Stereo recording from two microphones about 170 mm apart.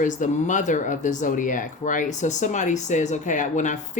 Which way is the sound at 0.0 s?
50° left (ahead or behind).